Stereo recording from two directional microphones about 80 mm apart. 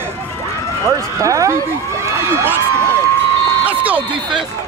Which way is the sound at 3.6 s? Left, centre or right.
Centre.